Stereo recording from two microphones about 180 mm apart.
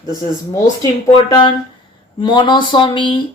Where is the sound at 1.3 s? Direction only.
25° left (ahead or behind).